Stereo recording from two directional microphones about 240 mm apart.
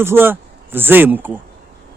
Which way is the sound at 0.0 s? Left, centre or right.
Centre.